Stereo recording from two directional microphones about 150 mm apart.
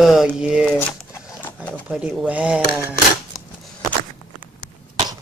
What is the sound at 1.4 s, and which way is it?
Pigeon, 10° left (ahead or behind).